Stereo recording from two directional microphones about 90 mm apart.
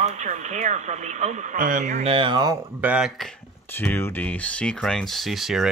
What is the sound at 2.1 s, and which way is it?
Speech, 65° right (ahead or behind).